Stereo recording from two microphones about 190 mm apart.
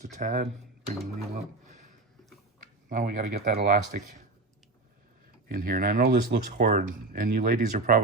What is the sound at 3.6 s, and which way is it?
Speech, 40° right (ahead or behind).